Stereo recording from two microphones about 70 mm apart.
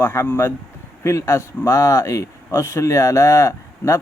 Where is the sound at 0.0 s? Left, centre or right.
Left.